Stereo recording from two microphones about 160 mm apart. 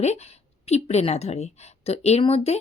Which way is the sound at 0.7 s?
45° left (ahead or behind).